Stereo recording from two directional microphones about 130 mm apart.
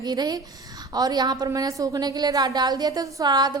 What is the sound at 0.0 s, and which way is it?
A woman's voice, 30° right (ahead or behind).